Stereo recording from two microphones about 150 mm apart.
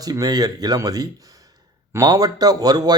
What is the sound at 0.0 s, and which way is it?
Speech, 25° right (ahead or behind).